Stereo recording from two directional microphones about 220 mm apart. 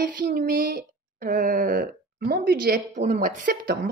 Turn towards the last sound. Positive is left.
turn(degrees=-45)  # may be behind; listen again after turning